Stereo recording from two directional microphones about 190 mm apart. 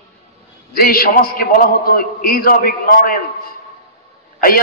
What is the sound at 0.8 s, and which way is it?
A man's voice, 50° left (ahead or behind).